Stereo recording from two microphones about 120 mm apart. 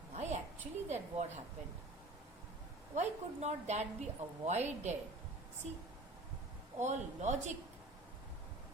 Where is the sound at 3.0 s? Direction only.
70° right (ahead or behind).